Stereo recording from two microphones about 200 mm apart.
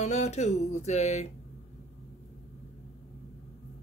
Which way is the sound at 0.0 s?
35° left (ahead or behind).